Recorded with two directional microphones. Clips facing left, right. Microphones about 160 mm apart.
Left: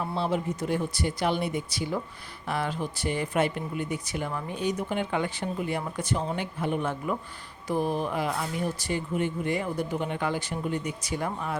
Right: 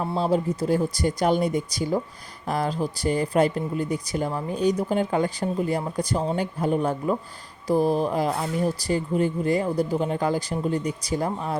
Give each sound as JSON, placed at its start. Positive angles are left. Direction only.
{"t": 0.0, "sound": "speech", "side_deg": -35}